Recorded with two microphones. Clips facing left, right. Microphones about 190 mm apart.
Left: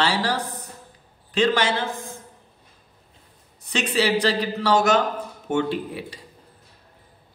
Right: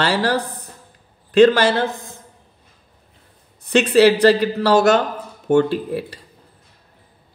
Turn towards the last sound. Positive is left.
turn(degrees=-60)  # may be behind; listen again after turning